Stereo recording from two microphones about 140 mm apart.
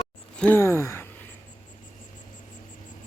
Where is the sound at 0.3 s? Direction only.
10° left (ahead or behind).